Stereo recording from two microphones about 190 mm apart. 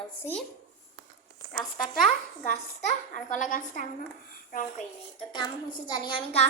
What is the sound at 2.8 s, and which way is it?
A child's voice, 40° left (ahead or behind).